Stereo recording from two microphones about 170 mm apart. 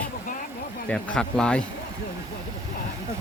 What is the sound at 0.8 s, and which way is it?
Speech, 5° left (ahead or behind).